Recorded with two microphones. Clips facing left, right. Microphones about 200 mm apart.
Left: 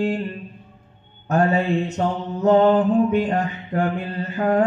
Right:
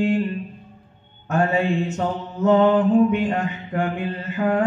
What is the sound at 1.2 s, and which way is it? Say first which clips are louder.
Mantra: left 1 dB; 35° left (ahead or behind).